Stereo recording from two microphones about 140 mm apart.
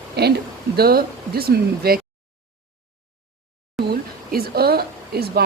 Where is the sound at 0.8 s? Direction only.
90° right.